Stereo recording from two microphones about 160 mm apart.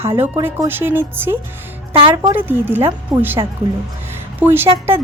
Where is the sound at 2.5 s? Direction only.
15° right (ahead or behind).